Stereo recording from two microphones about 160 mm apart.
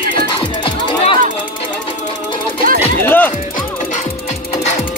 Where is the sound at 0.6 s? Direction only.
30° left (ahead or behind).